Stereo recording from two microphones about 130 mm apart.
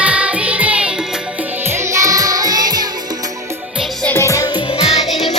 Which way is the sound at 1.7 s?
25° right (ahead or behind).